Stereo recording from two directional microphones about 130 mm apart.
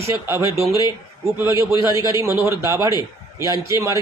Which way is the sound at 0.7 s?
30° left (ahead or behind).